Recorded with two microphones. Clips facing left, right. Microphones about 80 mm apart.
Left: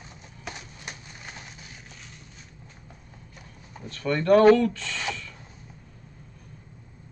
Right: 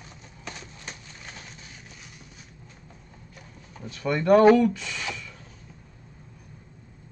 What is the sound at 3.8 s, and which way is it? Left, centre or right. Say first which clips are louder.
Speech: even; centre.